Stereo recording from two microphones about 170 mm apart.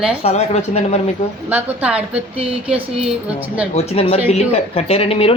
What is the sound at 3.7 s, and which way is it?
Speech, 35° left (ahead or behind).